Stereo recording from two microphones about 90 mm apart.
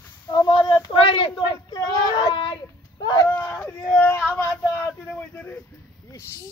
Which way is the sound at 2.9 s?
55° left (ahead or behind).